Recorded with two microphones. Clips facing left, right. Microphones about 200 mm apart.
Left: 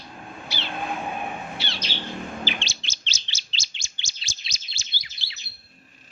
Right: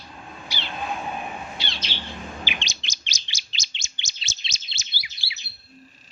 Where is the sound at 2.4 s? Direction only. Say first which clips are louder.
Left 3 dB; 15° right (ahead or behind).